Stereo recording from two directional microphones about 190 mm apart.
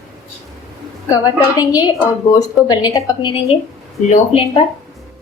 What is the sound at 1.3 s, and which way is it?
Speech, 20° left (ahead or behind).